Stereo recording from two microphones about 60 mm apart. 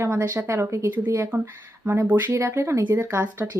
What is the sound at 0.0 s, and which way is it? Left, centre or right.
Speech, right.